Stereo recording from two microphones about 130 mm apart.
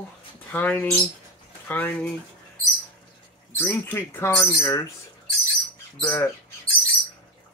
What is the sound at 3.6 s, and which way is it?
Speech, 15° left (ahead or behind).